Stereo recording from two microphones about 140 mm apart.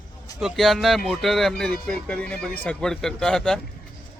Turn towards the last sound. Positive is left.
turn(degrees=5)  # may be behind; listen again after turning